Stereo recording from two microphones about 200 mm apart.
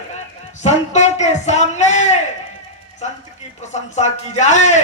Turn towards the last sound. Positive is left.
turn(degrees=35)  # may be behind; listen again after turning